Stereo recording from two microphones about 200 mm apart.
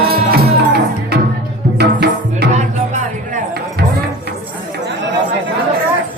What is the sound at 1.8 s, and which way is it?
Music, 55° right (ahead or behind).